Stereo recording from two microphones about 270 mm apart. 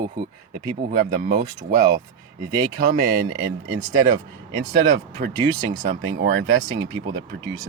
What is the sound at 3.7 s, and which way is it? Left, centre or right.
Speech, centre.